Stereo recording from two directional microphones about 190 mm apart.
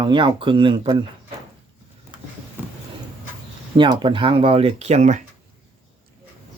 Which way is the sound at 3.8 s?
25° right (ahead or behind).